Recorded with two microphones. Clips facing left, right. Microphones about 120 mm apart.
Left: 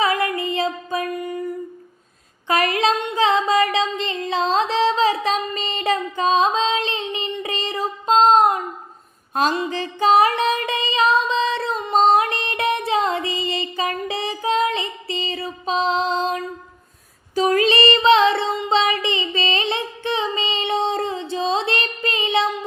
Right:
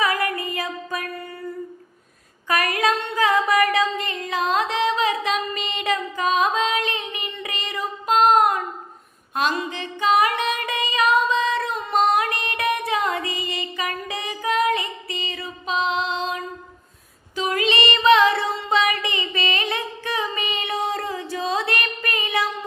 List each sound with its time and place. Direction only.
0.0 s music: 25° left (ahead or behind)
2.5 s a sound: 25° left (ahead or behind)
9.3 s music: 35° left (ahead or behind)